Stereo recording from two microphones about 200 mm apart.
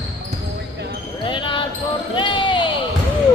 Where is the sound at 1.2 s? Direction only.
25° left (ahead or behind).